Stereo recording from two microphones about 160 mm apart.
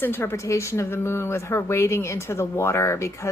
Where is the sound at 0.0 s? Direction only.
15° left (ahead or behind).